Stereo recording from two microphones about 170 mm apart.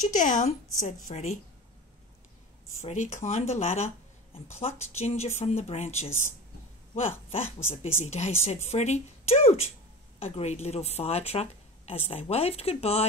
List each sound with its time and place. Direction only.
0.0 s a woman's voice: 50° left (ahead or behind)
2.8 s a woman's voice: 40° left (ahead or behind)